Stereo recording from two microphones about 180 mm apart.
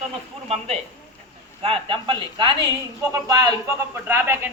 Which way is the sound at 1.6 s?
30° right (ahead or behind).